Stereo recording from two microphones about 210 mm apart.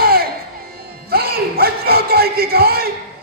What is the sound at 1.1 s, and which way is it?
Music, 45° right (ahead or behind).